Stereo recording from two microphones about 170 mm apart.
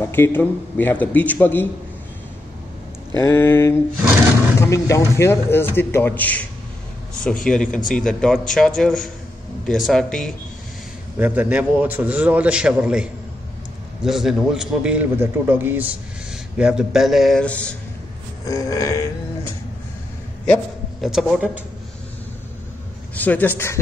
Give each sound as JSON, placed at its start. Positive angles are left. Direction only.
{"t": 0.0, "sound": "a man's voice", "side_deg": 10}
{"t": 3.2, "sound": "a man's voice", "side_deg": 15}
{"t": 7.4, "sound": "a man's voice", "side_deg": 5}
{"t": 11.1, "sound": "a man's voice", "side_deg": -10}
{"t": 18.4, "sound": "grunt", "side_deg": 20}
{"t": 20.4, "sound": "a sound", "side_deg": 10}
{"t": 21.1, "sound": "a man's voice", "side_deg": -5}
{"t": 23.1, "sound": "a man's voice", "side_deg": 10}